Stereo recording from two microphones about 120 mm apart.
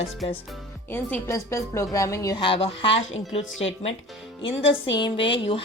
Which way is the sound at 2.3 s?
45° left (ahead or behind).